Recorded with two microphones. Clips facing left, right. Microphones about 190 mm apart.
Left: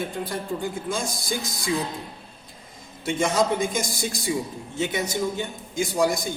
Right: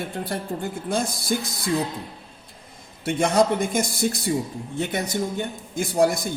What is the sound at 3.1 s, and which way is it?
A man's voice, 60° right (ahead or behind).